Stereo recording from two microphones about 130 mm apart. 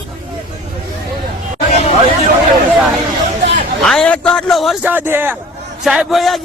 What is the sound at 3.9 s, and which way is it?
Speech, 10° left (ahead or behind).